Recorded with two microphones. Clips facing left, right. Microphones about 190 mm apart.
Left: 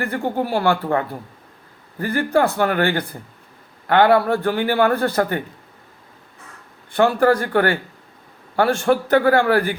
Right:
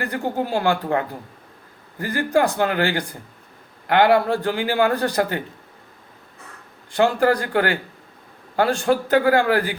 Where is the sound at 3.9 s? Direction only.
15° right (ahead or behind).